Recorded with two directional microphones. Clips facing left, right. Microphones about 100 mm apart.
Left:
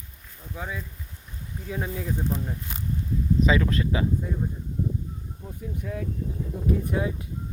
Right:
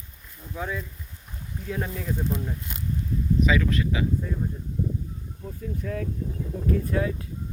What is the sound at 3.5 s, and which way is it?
Speech, 30° left (ahead or behind).